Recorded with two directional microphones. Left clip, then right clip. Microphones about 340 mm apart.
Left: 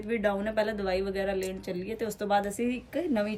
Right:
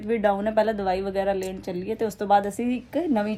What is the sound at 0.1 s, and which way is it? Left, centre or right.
A woman's voice, centre.